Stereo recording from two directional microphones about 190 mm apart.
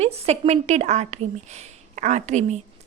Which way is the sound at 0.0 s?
35° right (ahead or behind).